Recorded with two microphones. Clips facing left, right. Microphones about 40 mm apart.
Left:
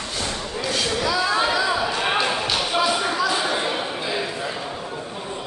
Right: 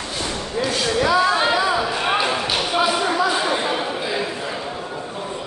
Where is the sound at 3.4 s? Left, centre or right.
Centre.